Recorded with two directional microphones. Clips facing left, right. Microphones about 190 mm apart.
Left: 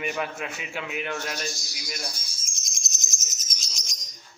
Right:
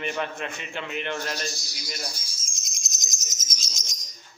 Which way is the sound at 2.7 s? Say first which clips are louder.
Right 2 dB; 15° right (ahead or behind).